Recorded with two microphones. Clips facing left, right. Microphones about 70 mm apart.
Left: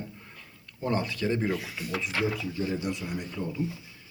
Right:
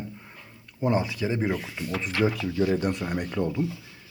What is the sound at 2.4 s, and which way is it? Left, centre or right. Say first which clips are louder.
Speech: right 6 dB; right.